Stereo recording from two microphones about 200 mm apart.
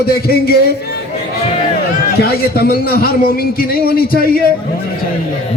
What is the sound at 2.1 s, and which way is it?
A man's voice, 50° left (ahead or behind).